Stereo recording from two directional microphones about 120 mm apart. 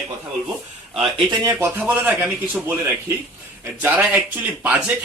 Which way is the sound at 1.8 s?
10° right (ahead or behind).